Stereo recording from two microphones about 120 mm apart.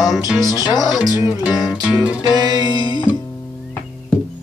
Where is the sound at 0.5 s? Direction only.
35° left (ahead or behind).